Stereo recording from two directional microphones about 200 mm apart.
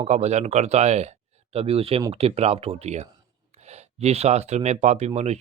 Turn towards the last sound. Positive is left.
turn(degrees=-35)  # may be behind; listen again after turning